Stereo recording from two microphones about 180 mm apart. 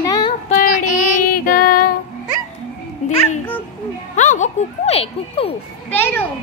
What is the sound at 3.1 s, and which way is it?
Speech, 35° left (ahead or behind).